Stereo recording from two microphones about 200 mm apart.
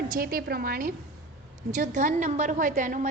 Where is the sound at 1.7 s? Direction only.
35° right (ahead or behind).